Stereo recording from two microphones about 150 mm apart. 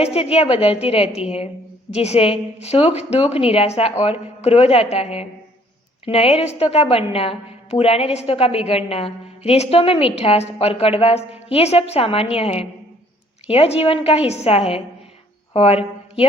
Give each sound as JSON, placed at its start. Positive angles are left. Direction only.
{"t": 0.0, "sound": "a woman's voice", "side_deg": 40}